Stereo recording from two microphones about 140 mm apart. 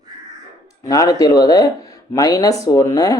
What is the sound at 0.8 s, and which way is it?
Speech, 25° left (ahead or behind).